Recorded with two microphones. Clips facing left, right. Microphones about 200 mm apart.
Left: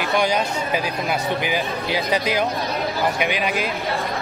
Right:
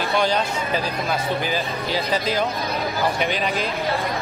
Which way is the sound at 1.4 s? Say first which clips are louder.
Left 1 dB; 15° left (ahead or behind).